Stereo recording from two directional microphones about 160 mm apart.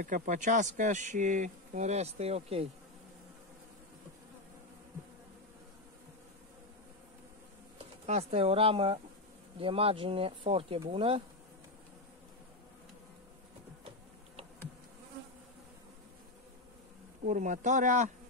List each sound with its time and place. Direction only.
0.0 s speech: 55° right (ahead or behind); by 2.7 s 40° right (ahead or behind)
8.1 s speech: 40° right (ahead or behind)
17.2 s speech: 50° right (ahead or behind)